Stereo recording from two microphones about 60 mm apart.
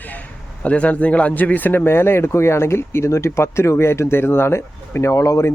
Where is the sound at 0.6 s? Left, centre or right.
Left.